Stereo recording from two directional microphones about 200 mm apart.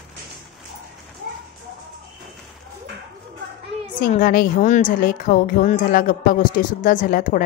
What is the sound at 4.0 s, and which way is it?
A woman's voice, 45° left (ahead or behind).